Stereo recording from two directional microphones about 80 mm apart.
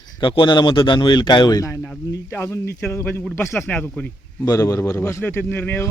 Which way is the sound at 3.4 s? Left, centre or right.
Left.